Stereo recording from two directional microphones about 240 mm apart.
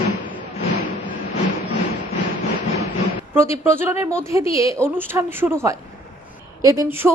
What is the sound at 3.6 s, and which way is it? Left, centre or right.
Speech, centre.